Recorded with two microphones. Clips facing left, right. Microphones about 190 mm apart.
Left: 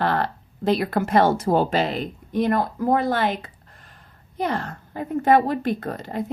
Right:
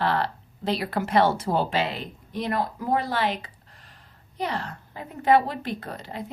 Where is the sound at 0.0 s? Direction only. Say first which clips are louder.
Left 2 dB; 50° left (ahead or behind).